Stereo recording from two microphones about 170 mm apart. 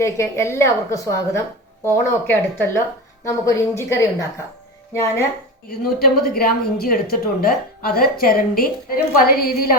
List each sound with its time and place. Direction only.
0.0 s a woman's voice: 15° left (ahead or behind)
5.6 s a woman's voice: 65° left (ahead or behind)